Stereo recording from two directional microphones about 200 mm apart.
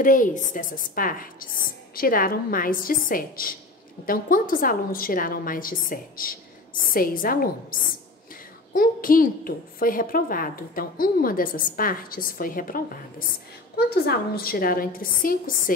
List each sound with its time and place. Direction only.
0.0 s a woman's voice: 40° left (ahead or behind)
8.7 s a woman's voice: 45° left (ahead or behind)